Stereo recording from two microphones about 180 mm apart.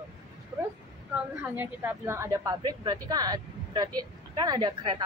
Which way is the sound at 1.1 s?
10° right (ahead or behind).